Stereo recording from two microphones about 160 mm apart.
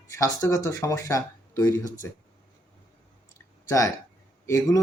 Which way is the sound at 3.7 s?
20° left (ahead or behind).